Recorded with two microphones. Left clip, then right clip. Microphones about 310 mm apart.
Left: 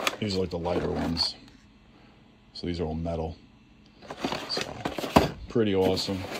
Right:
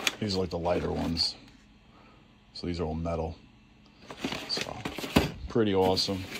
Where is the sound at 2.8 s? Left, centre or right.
Centre.